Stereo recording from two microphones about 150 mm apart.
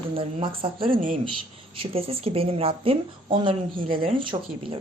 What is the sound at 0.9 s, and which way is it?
Speech, 60° right (ahead or behind).